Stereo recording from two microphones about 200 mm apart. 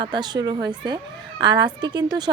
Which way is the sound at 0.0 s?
20° right (ahead or behind).